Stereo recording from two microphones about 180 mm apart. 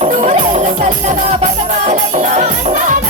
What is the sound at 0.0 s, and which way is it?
Music, 40° right (ahead or behind).